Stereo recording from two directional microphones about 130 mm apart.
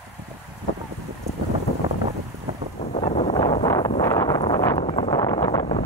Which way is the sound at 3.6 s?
30° left (ahead or behind).